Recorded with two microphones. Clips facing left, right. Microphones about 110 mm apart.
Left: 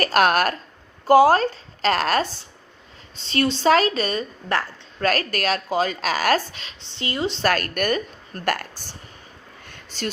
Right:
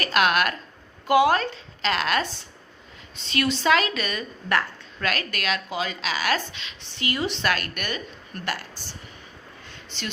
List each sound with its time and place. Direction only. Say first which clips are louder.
0.0 s a woman's voice: left 4 dB; 40° left (ahead or behind)
6.8 s speech: left 2 dB; 30° left (ahead or behind)
7.4 s a woman's voice: left 6 dB; 45° left (ahead or behind)
9.6 s a sound: left 6 dB; 45° left (ahead or behind)